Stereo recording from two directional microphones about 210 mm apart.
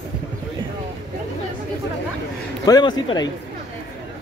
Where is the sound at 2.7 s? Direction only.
20° left (ahead or behind).